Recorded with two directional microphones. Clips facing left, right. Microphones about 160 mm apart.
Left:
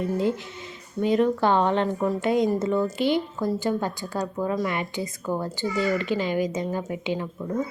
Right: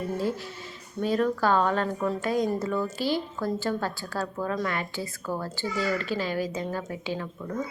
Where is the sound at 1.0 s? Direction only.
20° left (ahead or behind).